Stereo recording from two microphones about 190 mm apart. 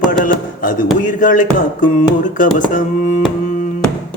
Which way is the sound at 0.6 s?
45° left (ahead or behind).